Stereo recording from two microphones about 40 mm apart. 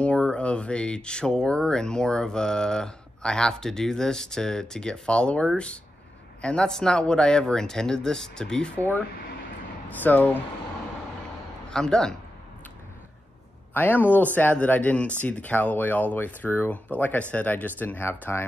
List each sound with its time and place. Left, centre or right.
0.0 s speech: left
9.8 s speech: left
11.7 s speech: centre
13.7 s speech: left
16.7 s speech: left